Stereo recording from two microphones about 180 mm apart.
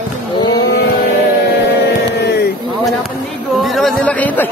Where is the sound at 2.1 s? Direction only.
65° left (ahead or behind).